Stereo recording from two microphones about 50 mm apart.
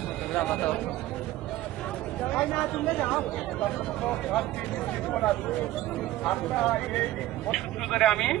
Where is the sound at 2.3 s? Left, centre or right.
Left.